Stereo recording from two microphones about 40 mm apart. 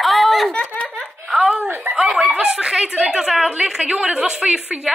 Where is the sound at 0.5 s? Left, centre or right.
Left.